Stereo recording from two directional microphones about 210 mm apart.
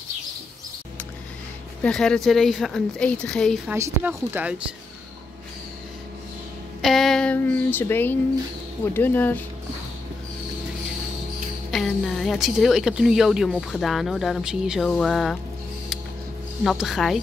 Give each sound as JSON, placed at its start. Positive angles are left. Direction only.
{"t": 1.8, "sound": "speech", "side_deg": 5}
{"t": 3.7, "sound": "speech", "side_deg": -15}
{"t": 6.8, "sound": "speech", "side_deg": 0}
{"t": 11.7, "sound": "speech", "side_deg": 0}
{"t": 16.6, "sound": "speech", "side_deg": 0}